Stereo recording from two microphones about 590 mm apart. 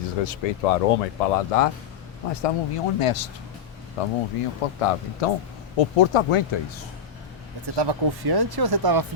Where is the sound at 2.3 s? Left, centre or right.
Left.